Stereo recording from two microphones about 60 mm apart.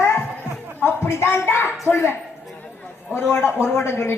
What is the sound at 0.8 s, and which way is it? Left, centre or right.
Speech, left.